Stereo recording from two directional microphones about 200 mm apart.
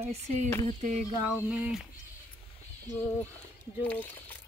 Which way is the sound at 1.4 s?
5° right (ahead or behind).